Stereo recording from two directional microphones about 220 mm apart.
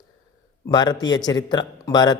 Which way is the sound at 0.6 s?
20° left (ahead or behind).